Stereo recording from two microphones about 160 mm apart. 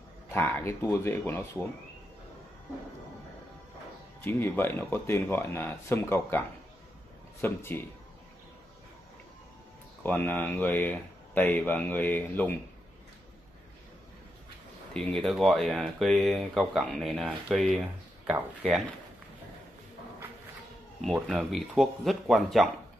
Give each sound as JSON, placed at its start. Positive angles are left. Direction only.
{"t": 0.3, "sound": "speech", "side_deg": 10}
{"t": 4.2, "sound": "speech", "side_deg": 15}
{"t": 7.4, "sound": "speech", "side_deg": 15}
{"t": 10.0, "sound": "speech", "side_deg": 10}
{"t": 15.0, "sound": "speech", "side_deg": 0}
{"t": 21.0, "sound": "speech", "side_deg": 0}